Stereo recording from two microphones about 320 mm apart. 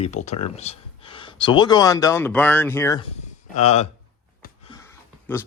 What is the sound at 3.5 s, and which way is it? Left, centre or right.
Speech, left.